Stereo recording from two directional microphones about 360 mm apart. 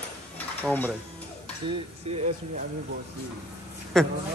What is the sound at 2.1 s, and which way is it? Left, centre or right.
Speech, centre.